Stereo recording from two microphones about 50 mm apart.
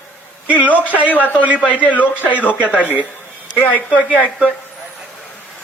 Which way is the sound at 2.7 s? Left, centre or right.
Right.